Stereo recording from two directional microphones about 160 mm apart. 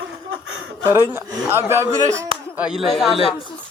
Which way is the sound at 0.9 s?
15° right (ahead or behind).